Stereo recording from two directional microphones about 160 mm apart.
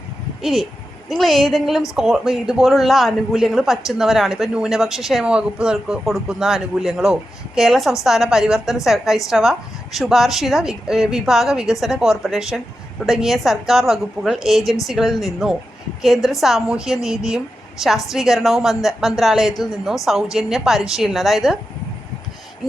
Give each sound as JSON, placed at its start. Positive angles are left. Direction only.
{"t": 0.4, "sound": "a man's voice", "side_deg": 0}